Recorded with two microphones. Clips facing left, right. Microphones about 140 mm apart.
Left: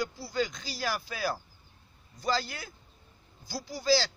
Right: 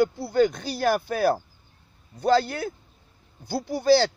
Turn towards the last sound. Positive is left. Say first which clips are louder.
# right 8 dB
turn(degrees=-55)  # may be behind; listen again after turning